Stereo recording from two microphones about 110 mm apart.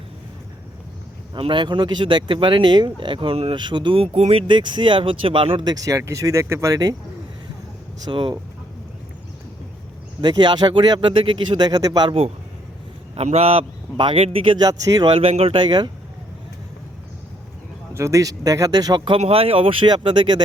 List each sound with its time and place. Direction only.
1.4 s a man's voice: 45° right (ahead or behind); by 4.4 s 65° right (ahead or behind)
4.4 s speech: 45° right (ahead or behind)
5.6 s speech: 30° right (ahead or behind)
8.0 s speech: 45° right (ahead or behind)
10.2 s speech: 45° right (ahead or behind)
13.1 s a man's voice: 65° right (ahead or behind)
14.6 s speech: 35° right (ahead or behind)
15.1 s a man's voice: 60° right (ahead or behind)
15.5 s speech: 40° right (ahead or behind)
17.9 s speech: 25° right (ahead or behind); by 19.2 s 50° right (ahead or behind)
19.2 s speech: 60° right (ahead or behind)